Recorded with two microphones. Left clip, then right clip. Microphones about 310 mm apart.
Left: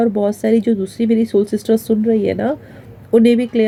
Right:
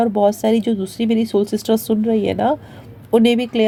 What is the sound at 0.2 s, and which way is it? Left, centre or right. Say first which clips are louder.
Speech: right 1 dB; right.